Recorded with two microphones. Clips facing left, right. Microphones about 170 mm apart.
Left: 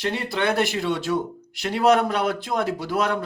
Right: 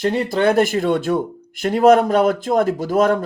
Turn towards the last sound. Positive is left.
turn(degrees=-45)  # may be behind; listen again after turning